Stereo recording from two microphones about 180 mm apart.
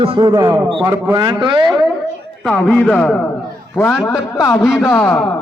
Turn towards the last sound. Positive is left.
turn(degrees=10)  # may be behind; listen again after turning